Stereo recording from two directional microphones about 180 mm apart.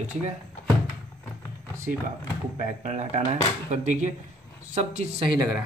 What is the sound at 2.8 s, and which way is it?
Speech, 40° right (ahead or behind).